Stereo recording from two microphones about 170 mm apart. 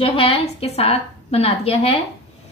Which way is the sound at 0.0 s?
35° left (ahead or behind).